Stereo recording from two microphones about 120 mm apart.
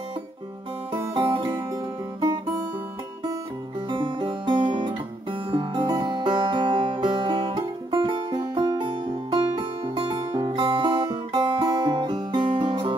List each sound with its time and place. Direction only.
1.1 s music: 45° right (ahead or behind)
3.9 s music: 45° right (ahead or behind)